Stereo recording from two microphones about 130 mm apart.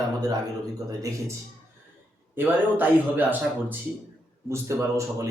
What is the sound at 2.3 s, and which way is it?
Speech, 15° right (ahead or behind).